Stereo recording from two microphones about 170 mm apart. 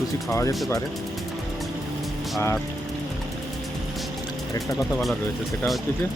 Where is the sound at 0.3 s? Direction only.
20° left (ahead or behind).